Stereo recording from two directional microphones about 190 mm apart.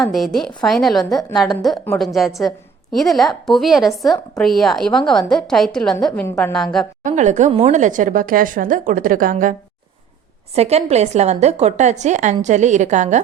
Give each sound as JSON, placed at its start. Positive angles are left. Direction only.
{"t": 0.0, "sound": "a woman's voice", "side_deg": 0}
{"t": 7.0, "sound": "speech", "side_deg": -40}
{"t": 10.5, "sound": "a woman's voice", "side_deg": -35}